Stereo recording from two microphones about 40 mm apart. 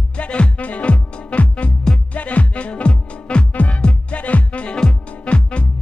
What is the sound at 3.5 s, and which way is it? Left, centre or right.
Music, left.